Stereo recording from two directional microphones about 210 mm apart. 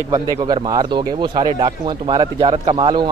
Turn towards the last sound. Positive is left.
turn(degrees=-25)  # may be behind; listen again after turning